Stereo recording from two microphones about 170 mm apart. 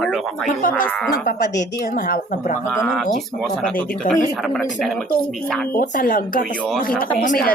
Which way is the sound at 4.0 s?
50° left (ahead or behind).